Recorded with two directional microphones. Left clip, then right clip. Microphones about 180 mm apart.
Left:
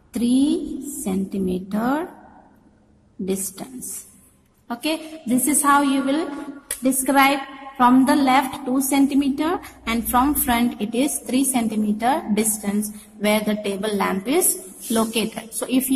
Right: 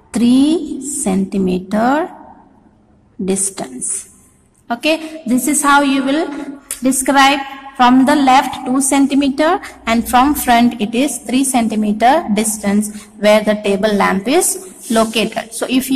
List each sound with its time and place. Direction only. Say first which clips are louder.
0.1 s a woman's voice: right 7 dB; 15° right (ahead or behind)
3.3 s a woman's voice: right 8 dB; 15° right (ahead or behind)